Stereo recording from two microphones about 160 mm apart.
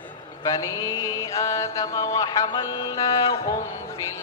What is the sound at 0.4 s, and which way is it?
Speech, 25° left (ahead or behind).